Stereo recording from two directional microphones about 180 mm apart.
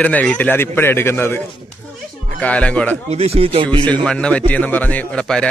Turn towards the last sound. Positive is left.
turn(degrees=5)  # may be behind; listen again after turning